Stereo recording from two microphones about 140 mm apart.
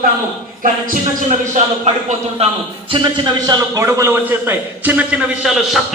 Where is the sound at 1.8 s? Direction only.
45° right (ahead or behind).